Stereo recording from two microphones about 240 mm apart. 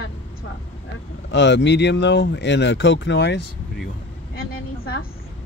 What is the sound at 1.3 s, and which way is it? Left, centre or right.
Speech, left.